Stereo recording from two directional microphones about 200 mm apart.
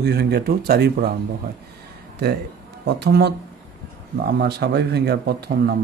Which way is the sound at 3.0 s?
55° right (ahead or behind).